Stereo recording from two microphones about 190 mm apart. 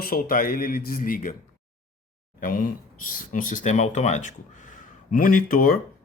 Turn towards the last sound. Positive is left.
turn(degrees=50)  # may be behind; listen again after turning